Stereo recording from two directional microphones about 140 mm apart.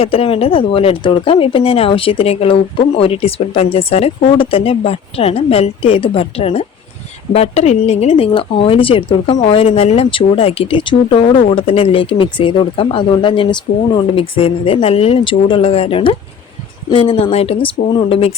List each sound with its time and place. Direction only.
0.0 s speech: 45° left (ahead or behind)